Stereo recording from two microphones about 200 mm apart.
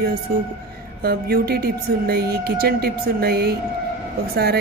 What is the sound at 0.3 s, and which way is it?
A woman's voice, 45° right (ahead or behind).